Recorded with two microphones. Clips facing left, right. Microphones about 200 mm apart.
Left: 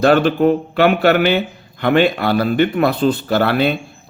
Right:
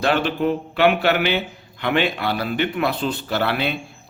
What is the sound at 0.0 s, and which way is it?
Speech, 45° left (ahead or behind).